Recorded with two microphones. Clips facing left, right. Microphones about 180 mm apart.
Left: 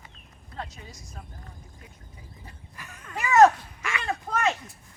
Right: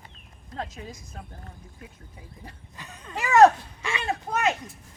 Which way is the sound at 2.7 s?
20° right (ahead or behind).